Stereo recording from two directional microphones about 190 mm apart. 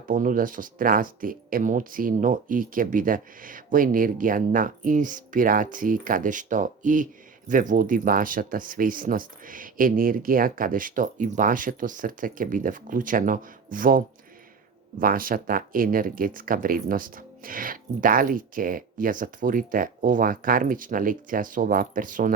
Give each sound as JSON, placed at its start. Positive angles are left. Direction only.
{"t": 0.1, "sound": "speech", "side_deg": -45}